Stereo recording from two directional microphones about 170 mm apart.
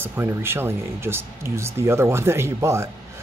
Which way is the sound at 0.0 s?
15° right (ahead or behind).